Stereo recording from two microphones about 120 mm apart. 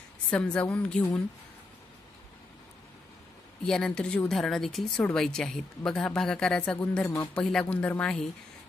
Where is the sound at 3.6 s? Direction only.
5° left (ahead or behind).